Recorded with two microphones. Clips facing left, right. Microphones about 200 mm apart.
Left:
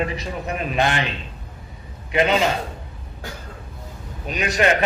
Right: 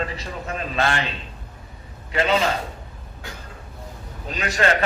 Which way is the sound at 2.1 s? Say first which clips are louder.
Left 2 dB; 20° left (ahead or behind).